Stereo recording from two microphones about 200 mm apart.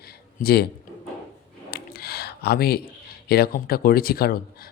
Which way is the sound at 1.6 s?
45° left (ahead or behind).